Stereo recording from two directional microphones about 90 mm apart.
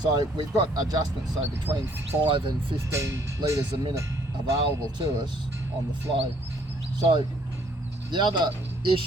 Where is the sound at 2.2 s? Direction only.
75° right (ahead or behind).